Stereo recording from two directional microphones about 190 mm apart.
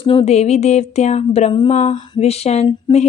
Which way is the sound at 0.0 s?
30° left (ahead or behind).